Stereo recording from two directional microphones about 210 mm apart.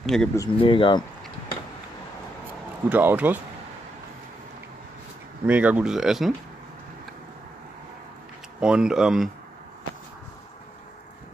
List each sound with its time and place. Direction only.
0.0 s speech: centre (ahead or behind)
0.4 s speech: 25° left (ahead or behind)
2.9 s speech: 10° right (ahead or behind)
5.5 s speech: 5° right (ahead or behind)
8.5 s speech: 5° right (ahead or behind)